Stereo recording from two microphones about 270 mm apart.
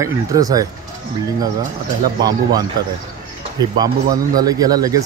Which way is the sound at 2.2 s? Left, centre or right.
Centre.